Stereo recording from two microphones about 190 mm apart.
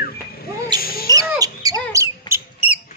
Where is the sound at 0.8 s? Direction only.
50° left (ahead or behind).